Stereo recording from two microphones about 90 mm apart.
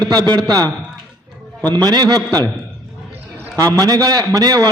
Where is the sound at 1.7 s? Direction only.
50° right (ahead or behind).